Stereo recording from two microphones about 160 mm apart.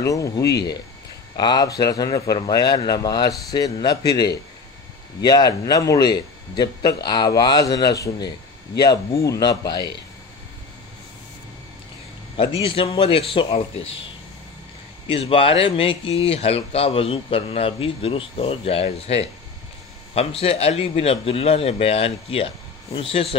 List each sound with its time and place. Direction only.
0.0 s a man's voice: 20° left (ahead or behind)
12.6 s speech: 35° left (ahead or behind)
15.0 s speech: 35° left (ahead or behind)